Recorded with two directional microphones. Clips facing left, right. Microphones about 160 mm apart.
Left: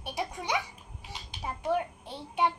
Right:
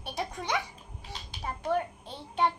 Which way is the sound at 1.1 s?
15° left (ahead or behind).